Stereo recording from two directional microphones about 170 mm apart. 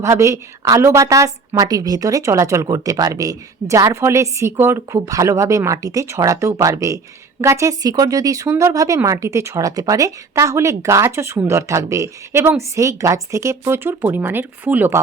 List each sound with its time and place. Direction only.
0.0 s a woman's voice: 15° right (ahead or behind)